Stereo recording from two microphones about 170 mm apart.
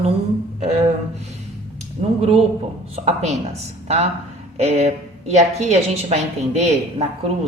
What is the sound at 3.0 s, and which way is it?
Speech, 40° right (ahead or behind).